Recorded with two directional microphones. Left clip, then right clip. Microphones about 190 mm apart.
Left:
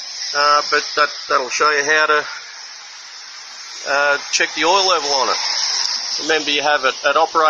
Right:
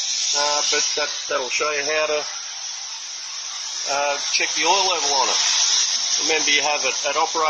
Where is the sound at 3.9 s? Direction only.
10° left (ahead or behind).